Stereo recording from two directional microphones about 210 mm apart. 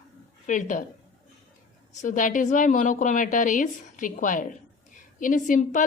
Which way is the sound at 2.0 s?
40° left (ahead or behind).